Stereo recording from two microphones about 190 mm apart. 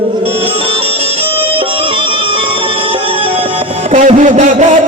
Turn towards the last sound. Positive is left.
turn(degrees=-40)  # may be behind; listen again after turning